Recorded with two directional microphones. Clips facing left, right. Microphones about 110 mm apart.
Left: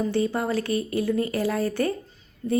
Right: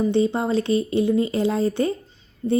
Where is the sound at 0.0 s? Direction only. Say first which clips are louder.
Right 4 dB; 20° right (ahead or behind).